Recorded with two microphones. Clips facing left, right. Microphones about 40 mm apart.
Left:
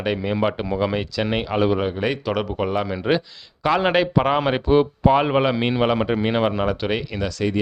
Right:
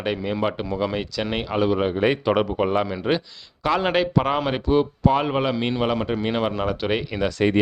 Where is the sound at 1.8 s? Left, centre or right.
Centre.